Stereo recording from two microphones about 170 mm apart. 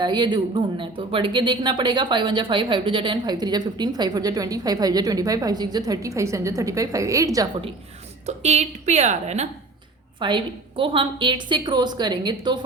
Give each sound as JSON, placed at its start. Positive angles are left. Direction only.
{"t": 0.0, "sound": "speech", "side_deg": -25}
{"t": 8.3, "sound": "a woman's voice", "side_deg": -40}
{"t": 10.2, "sound": "speech", "side_deg": -30}